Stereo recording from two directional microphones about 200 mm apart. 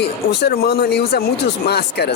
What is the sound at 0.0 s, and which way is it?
Speech, 55° left (ahead or behind).